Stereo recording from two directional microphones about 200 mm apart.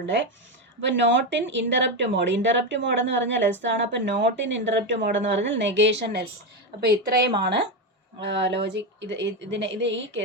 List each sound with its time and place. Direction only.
0.8 s speech: 65° right (ahead or behind)